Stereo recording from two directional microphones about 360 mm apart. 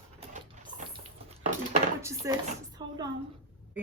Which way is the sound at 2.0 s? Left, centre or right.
Centre.